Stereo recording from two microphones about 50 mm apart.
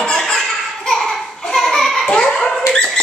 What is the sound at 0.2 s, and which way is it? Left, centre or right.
Laughter, centre.